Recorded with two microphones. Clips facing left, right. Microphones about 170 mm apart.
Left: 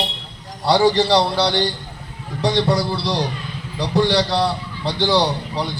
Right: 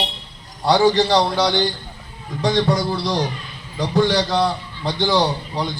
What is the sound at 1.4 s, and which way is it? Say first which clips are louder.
A man's voice: even; 30° left (ahead or behind).